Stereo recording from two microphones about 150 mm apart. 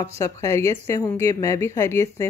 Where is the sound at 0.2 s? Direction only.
20° left (ahead or behind).